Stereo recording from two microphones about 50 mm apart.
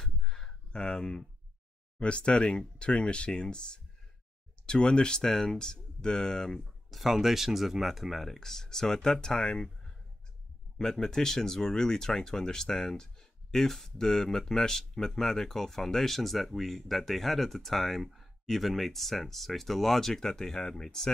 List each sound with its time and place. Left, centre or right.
0.0 s a sound: centre
2.0 s speech: left
6.9 s speech: centre